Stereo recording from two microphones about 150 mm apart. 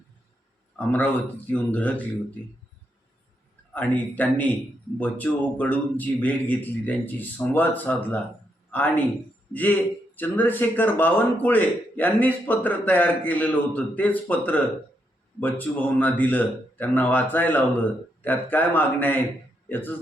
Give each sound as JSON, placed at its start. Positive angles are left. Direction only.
{"t": 0.8, "sound": "a man's voice", "side_deg": 10}
{"t": 3.8, "sound": "a man's voice", "side_deg": 10}